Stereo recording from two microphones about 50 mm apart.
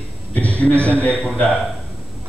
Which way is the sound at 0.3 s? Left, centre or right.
Left.